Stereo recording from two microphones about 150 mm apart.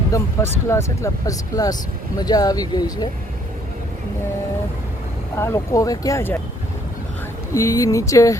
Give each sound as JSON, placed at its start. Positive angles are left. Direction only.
{"t": 0.1, "sound": "speech", "side_deg": 15}
{"t": 5.4, "sound": "speech", "side_deg": 20}
{"t": 7.5, "sound": "speech", "side_deg": 20}